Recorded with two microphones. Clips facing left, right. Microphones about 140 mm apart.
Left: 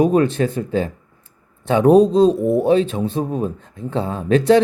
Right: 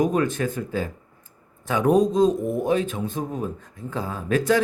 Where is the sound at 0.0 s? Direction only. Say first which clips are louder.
Left 6 dB; 25° left (ahead or behind).